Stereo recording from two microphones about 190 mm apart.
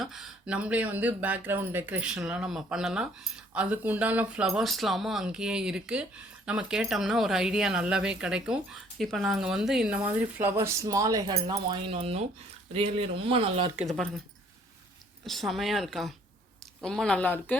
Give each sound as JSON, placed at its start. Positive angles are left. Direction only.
{"t": 0.0, "sound": "speech", "side_deg": 0}
{"t": 15.3, "sound": "speech", "side_deg": 0}